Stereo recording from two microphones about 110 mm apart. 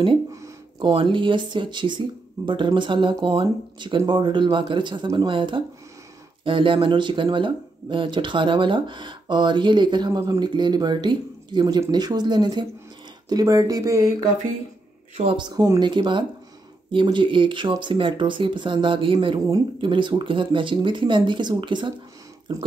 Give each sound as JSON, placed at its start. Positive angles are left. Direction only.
{"t": 0.7, "sound": "speech", "side_deg": -45}
{"t": 15.2, "sound": "speech", "side_deg": -45}